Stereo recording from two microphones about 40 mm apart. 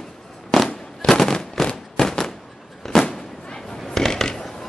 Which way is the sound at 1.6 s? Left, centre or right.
Centre.